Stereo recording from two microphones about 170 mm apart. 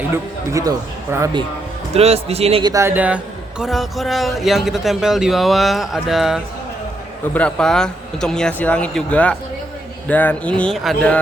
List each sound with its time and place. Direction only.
0.5 s speech: 20° right (ahead or behind)
1.9 s a man's voice: 35° right (ahead or behind)
2.6 s a man's voice: 15° right (ahead or behind); by 9.3 s 10° left (ahead or behind)
10.1 s music: 10° left (ahead or behind)